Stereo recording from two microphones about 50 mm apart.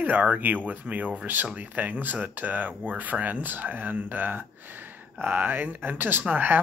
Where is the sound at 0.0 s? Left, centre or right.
Right.